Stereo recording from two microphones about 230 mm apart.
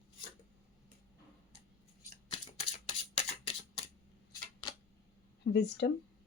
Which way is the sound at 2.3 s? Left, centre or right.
Left.